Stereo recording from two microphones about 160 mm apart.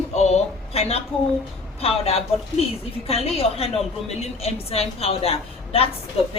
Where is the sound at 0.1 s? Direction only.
45° left (ahead or behind).